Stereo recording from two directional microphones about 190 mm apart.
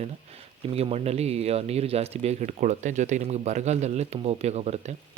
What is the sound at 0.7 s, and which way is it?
Speech, 30° right (ahead or behind).